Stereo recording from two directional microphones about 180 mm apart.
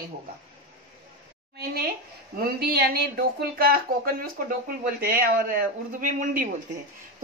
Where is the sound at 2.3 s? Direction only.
60° right (ahead or behind).